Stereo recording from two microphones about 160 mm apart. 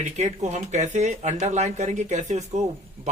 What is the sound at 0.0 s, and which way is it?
Speech, 45° right (ahead or behind).